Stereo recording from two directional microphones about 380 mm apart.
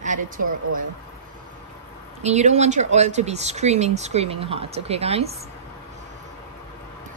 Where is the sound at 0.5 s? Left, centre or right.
Right.